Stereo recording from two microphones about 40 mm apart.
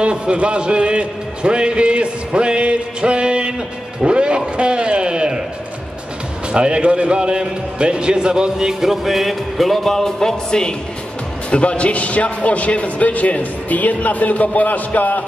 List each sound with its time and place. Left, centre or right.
0.0 s a man's voice: right
6.5 s a man's voice: right
8.8 s music: centre
11.5 s speech: left